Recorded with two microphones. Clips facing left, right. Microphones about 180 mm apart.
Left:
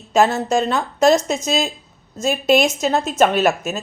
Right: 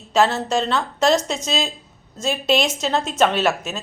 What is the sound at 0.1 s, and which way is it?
Speech, 45° left (ahead or behind).